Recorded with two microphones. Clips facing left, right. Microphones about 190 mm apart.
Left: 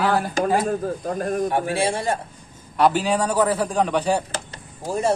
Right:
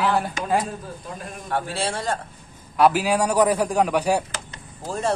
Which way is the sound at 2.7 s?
5° right (ahead or behind).